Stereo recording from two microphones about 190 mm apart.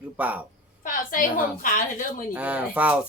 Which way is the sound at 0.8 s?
45° left (ahead or behind).